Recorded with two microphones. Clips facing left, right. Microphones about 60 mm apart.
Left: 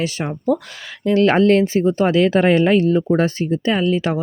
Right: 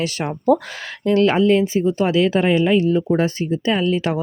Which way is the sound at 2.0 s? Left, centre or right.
Left.